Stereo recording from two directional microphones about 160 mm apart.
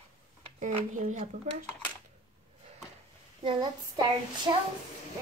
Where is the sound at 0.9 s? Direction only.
50° right (ahead or behind).